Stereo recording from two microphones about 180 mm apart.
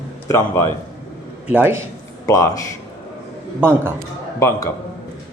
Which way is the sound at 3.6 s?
10° right (ahead or behind).